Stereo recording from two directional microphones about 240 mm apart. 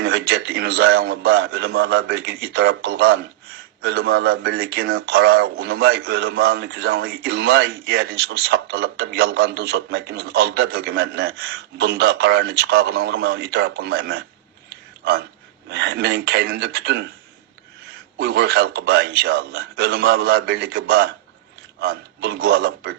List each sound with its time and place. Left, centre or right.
0.0 s speech: right
15.7 s speech: right
18.2 s speech: right